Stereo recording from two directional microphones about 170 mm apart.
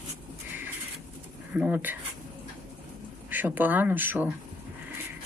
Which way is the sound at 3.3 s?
10° right (ahead or behind).